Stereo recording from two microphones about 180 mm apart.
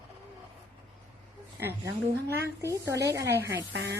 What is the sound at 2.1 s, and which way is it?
Speech, 65° right (ahead or behind).